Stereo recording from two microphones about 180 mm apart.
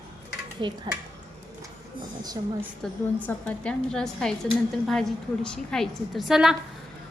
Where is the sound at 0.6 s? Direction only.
25° right (ahead or behind).